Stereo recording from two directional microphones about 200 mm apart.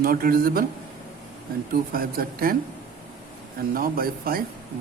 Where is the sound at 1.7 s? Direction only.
50° right (ahead or behind).